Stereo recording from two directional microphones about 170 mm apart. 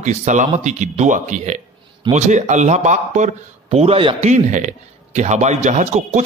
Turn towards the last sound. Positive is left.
turn(degrees=-45)  # may be behind; listen again after turning